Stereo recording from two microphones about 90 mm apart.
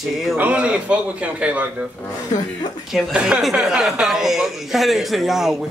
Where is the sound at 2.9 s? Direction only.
5° right (ahead or behind).